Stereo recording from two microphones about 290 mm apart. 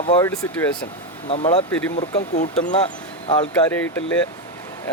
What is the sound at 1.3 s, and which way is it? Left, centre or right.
Speech, centre.